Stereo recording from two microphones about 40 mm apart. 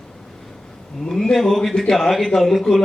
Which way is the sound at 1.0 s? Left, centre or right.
Centre.